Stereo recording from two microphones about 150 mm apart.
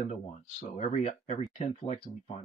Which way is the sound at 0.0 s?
55° left (ahead or behind).